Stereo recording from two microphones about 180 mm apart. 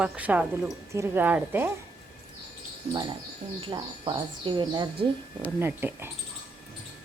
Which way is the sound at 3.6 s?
30° right (ahead or behind).